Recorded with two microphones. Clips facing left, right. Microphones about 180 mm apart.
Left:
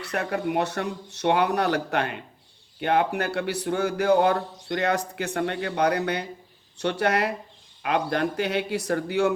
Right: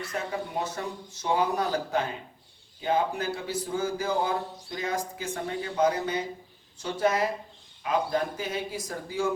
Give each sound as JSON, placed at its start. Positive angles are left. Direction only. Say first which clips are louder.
{"t": 0.0, "sound": "a man's voice", "louder": "left 5 dB", "side_deg": 70}